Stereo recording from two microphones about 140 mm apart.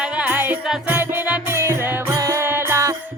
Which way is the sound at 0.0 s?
5° right (ahead or behind).